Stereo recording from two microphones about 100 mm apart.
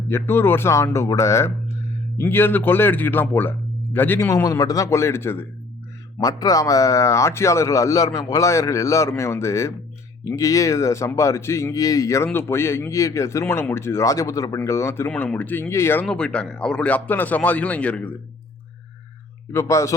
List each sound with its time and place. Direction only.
0.1 s speech: 25° left (ahead or behind)
4.3 s speech: 30° left (ahead or behind)
6.1 s speech: 35° left (ahead or behind)
15.1 s speech: 15° left (ahead or behind)
16.0 s speech: 10° left (ahead or behind)
19.5 s speech: 30° left (ahead or behind)